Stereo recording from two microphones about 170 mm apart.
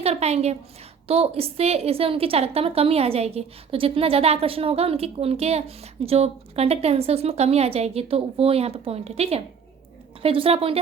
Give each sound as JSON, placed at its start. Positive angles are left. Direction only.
{"t": 0.0, "sound": "a woman's voice", "side_deg": -40}